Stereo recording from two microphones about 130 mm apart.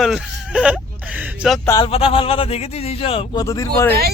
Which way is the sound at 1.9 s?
45° left (ahead or behind).